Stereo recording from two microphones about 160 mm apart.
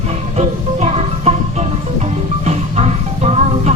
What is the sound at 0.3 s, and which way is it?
Music, 40° right (ahead or behind).